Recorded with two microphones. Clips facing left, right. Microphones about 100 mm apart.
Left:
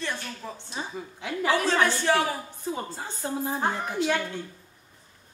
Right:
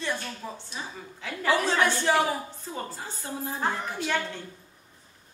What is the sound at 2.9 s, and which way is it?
A woman's voice, 20° left (ahead or behind).